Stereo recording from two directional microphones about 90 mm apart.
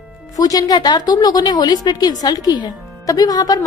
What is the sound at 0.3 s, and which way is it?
A woman's voice, 40° left (ahead or behind).